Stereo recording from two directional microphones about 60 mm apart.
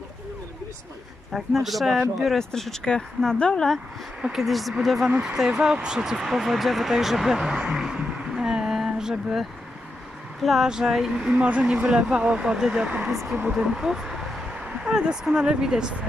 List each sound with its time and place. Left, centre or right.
1.3 s speech: centre
4.2 s speech: centre
11.3 s speech: right
13.1 s speech: centre